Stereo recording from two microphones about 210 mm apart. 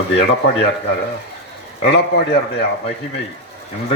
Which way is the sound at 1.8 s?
50° left (ahead or behind).